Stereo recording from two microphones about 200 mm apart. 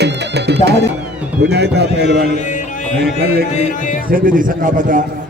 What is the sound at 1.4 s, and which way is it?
Speech, 55° right (ahead or behind).